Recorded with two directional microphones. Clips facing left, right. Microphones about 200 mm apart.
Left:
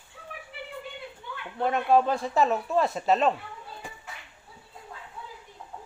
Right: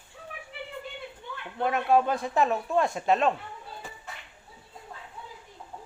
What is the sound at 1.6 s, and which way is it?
A man's voice, centre (ahead or behind).